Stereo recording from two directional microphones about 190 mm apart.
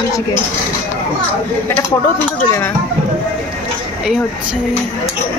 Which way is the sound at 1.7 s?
10° left (ahead or behind).